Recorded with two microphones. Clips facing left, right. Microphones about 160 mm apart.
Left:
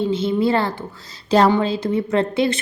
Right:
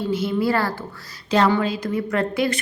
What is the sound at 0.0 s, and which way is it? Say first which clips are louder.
A woman's voice: left 3 dB; 25° left (ahead or behind).